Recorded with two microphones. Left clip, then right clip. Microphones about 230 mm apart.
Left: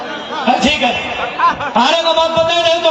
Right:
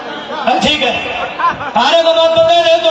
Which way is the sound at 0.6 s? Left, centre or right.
Right.